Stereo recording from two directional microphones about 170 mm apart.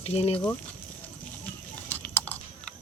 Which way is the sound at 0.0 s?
35° left (ahead or behind).